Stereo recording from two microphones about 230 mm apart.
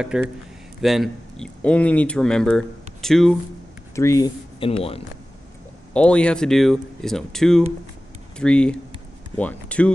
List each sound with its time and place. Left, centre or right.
0.0 s speech: centre
3.9 s speech: centre
5.9 s speech: centre